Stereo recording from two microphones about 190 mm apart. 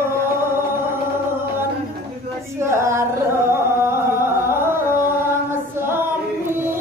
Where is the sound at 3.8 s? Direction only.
15° right (ahead or behind).